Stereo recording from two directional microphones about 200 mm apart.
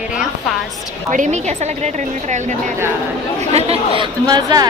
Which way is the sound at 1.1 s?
35° right (ahead or behind).